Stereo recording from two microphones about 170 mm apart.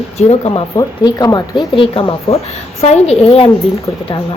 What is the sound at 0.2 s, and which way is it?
Speech, 35° left (ahead or behind).